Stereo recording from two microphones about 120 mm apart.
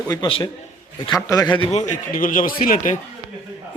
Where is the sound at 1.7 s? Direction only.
85° left.